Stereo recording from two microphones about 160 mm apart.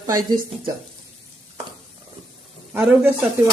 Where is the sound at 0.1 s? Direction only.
25° right (ahead or behind).